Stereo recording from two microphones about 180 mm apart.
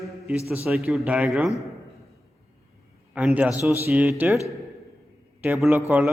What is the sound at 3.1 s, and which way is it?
Speech, 10° right (ahead or behind).